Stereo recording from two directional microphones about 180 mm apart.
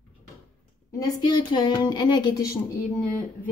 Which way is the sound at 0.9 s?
20° left (ahead or behind).